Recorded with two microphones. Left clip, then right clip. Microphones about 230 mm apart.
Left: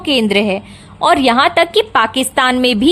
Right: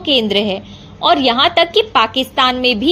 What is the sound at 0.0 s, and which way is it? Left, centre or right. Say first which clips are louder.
A woman's voice: left 1 dB; left.